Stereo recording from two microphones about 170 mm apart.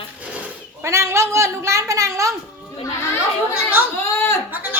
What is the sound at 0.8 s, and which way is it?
A woman's voice, 15° right (ahead or behind).